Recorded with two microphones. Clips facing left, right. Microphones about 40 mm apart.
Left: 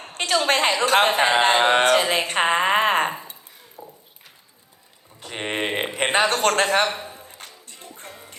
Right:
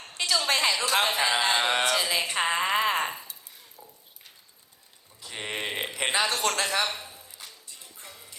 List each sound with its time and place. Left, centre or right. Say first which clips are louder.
0.1 s a woman's voice: left 6 dB; left
5.2 s a sound: left 7 dB; left
6.8 s a man's voice: left 6 dB; left
7.1 s music: left 6 dB; left